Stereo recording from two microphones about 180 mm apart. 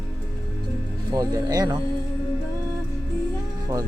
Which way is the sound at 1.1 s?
20° right (ahead or behind).